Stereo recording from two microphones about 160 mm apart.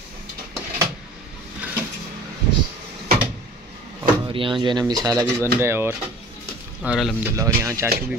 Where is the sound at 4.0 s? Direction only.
30° right (ahead or behind); by 5.9 s 15° right (ahead or behind).